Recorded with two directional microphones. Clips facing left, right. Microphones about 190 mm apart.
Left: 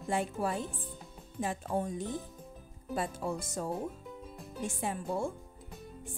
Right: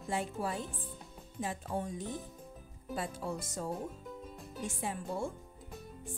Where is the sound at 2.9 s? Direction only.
50° left (ahead or behind).